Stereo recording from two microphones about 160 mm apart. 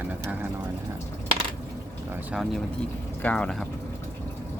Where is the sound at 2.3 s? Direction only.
Centre (ahead or behind).